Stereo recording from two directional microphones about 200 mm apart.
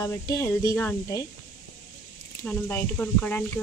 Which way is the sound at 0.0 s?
15° left (ahead or behind).